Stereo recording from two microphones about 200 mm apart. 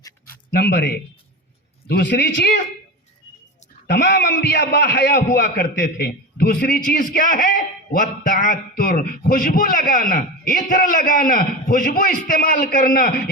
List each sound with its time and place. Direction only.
0.3 s a sound: 50° left (ahead or behind)
1.9 s a man's voice: 55° left (ahead or behind)
3.8 s a man's voice: 55° left (ahead or behind)